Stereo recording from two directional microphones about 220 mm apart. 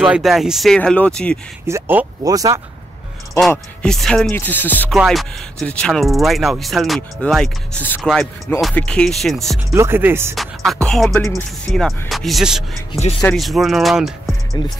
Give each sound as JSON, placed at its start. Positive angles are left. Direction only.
{"t": 0.1, "sound": "music", "side_deg": 0}
{"t": 1.7, "sound": "speech", "side_deg": -10}
{"t": 3.3, "sound": "music", "side_deg": 0}
{"t": 9.8, "sound": "speech", "side_deg": -10}
{"t": 10.3, "sound": "music", "side_deg": 0}
{"t": 11.2, "sound": "speech", "side_deg": 15}
{"t": 11.7, "sound": "music", "side_deg": 0}
{"t": 14.6, "sound": "speech", "side_deg": 20}